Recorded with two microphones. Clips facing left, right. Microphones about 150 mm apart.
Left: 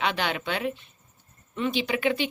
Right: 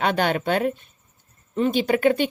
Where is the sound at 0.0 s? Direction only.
45° right (ahead or behind).